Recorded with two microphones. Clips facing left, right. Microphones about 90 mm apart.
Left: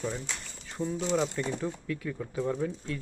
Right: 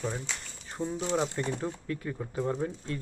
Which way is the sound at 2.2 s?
15° right (ahead or behind).